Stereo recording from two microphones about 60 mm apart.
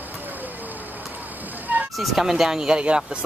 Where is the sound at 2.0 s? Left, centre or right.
Centre.